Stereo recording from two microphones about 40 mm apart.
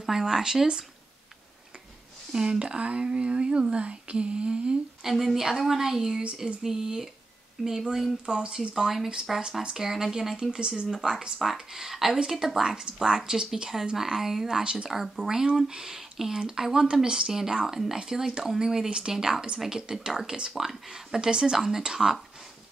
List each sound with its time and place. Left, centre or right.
0.0 s speech: centre
2.3 s speech: centre
5.0 s speech: centre
8.3 s speech: right
8.5 s speech: centre
9.6 s speech: centre
10.6 s speech: right
10.9 s speech: centre
14.6 s speech: right
14.9 s speech: centre
21.5 s speech: centre